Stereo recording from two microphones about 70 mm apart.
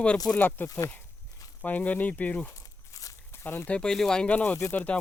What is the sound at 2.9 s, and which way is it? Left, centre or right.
Walk, left.